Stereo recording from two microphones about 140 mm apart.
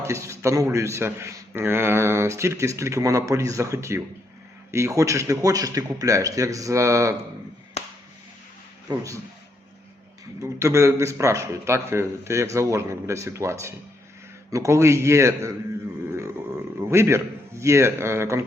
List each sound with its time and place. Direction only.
0.0 s a man's voice: 20° right (ahead or behind)
7.8 s a sound: 50° left (ahead or behind)
8.9 s a man's voice: 20° right (ahead or behind)
10.4 s a man's voice: 20° right (ahead or behind)
16.9 s a man's voice: 20° right (ahead or behind)